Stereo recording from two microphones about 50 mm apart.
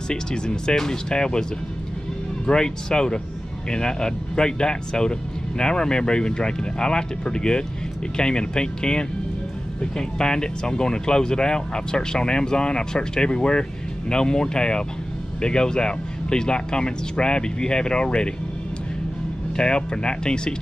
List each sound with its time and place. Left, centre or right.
0.1 s speech: centre
2.4 s speech: centre
19.5 s speech: centre